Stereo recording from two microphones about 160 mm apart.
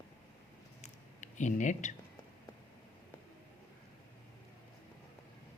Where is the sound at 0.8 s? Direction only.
50° left (ahead or behind).